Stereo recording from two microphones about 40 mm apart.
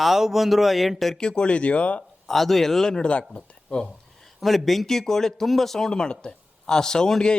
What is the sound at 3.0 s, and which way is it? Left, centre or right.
Speech, left.